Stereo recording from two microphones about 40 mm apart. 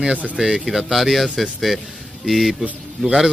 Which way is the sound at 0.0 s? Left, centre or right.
Right.